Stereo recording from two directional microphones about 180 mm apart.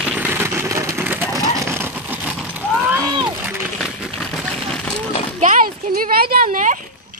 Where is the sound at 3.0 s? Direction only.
25° right (ahead or behind).